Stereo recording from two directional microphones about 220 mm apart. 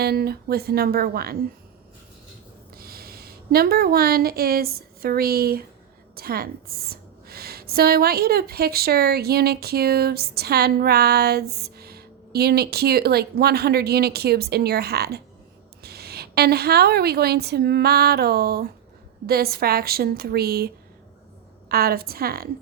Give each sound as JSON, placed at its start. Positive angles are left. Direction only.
{"t": 0.0, "sound": "a woman's voice", "side_deg": -45}
{"t": 2.7, "sound": "a woman's voice", "side_deg": -45}
{"t": 21.7, "sound": "a woman's voice", "side_deg": -45}